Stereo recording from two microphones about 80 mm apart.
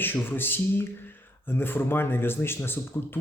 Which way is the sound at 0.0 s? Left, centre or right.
Left.